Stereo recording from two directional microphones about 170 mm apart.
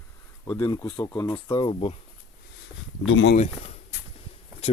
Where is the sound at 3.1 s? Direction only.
90° left.